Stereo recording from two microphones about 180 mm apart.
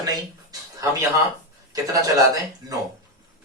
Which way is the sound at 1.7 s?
20° right (ahead or behind).